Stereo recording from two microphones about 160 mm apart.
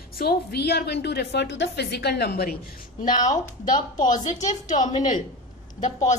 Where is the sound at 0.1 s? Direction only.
70° left (ahead or behind).